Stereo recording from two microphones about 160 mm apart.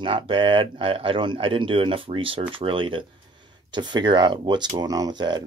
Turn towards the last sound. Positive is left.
turn(degrees=-25)  # may be behind; listen again after turning